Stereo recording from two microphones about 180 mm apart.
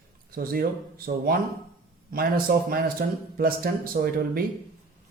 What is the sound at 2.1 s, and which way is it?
A man's voice, 55° right (ahead or behind).